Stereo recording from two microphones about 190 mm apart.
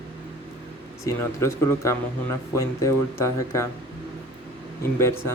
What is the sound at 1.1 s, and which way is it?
Speech, 15° left (ahead or behind).